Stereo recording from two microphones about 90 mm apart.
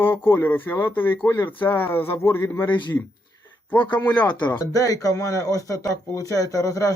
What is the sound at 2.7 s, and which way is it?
Speech, 55° left (ahead or behind).